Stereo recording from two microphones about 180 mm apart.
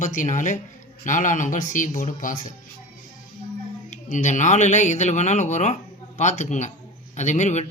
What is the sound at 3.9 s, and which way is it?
Speech, 45° left (ahead or behind).